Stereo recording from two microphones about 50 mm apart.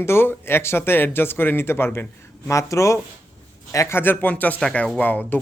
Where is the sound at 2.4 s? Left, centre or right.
Left.